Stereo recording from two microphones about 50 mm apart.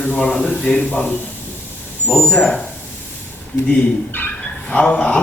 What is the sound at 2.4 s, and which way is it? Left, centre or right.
Speech, left.